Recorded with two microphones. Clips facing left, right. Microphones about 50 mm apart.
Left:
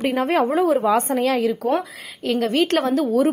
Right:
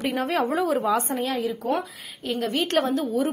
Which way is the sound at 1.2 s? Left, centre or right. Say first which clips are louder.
Left 7 dB; left.